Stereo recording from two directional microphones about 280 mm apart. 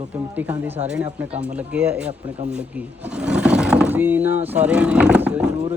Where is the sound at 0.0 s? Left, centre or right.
Centre.